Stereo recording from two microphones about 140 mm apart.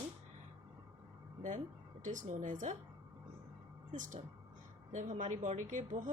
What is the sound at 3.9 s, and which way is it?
A woman's voice, 65° right (ahead or behind).